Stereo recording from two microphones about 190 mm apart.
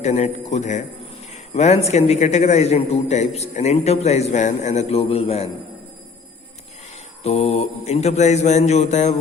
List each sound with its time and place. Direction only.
0.0 s a man's voice: 35° left (ahead or behind)
7.3 s a man's voice: 35° left (ahead or behind)